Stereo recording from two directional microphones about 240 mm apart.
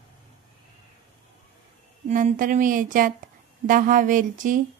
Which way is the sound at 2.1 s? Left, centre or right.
Right.